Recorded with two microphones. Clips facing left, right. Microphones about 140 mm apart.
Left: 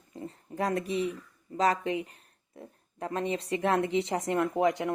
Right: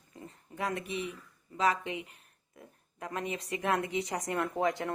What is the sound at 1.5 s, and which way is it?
Speech, 40° left (ahead or behind).